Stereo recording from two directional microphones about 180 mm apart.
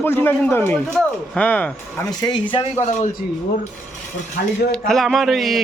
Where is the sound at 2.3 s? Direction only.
30° left (ahead or behind).